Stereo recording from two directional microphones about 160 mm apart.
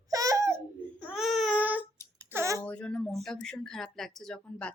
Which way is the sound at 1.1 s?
Centre (ahead or behind).